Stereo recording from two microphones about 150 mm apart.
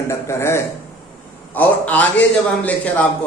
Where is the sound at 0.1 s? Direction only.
15° left (ahead or behind).